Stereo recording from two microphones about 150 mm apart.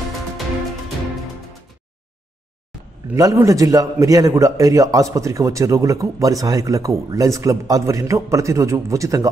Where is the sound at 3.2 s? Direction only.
20° right (ahead or behind).